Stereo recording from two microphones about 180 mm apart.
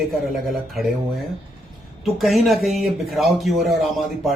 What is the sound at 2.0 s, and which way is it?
Speech, centre (ahead or behind).